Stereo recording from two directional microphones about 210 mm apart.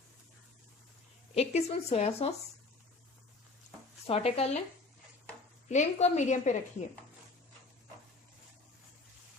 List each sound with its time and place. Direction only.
1.4 s a woman's voice: 30° left (ahead or behind)
4.0 s speech: 30° left (ahead or behind)
5.6 s a woman's voice: 35° left (ahead or behind)